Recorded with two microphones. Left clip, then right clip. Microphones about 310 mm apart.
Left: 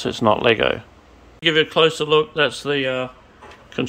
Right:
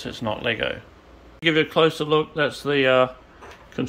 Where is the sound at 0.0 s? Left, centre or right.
Centre.